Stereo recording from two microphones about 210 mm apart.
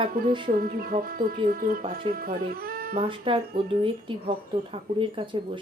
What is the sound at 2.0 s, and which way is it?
Speech, 25° right (ahead or behind).